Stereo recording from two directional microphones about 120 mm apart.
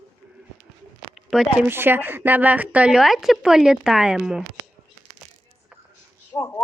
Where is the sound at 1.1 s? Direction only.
Centre (ahead or behind).